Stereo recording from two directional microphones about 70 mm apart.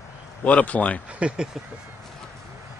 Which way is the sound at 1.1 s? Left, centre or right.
Centre.